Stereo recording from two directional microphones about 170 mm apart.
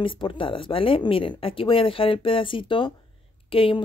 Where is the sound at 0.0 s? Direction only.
30° left (ahead or behind).